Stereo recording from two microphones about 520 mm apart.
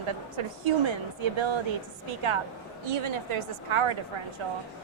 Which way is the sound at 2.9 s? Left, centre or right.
Right.